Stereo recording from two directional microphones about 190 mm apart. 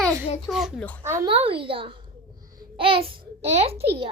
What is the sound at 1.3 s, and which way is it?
A woman's voice, 30° right (ahead or behind).